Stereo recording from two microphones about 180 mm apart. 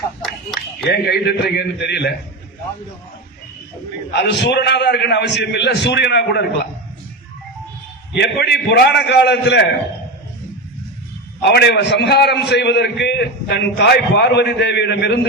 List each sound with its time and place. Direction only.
0.9 s a man's voice: 65° left (ahead or behind)
4.1 s a man's voice: 70° left (ahead or behind)
8.1 s a man's voice: 70° left (ahead or behind)
11.4 s a man's voice: 65° left (ahead or behind)